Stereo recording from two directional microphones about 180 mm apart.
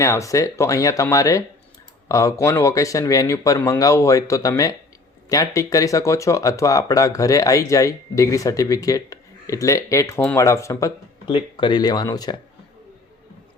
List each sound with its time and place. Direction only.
0.0 s speech: 15° left (ahead or behind)
11.3 s speech: 30° left (ahead or behind)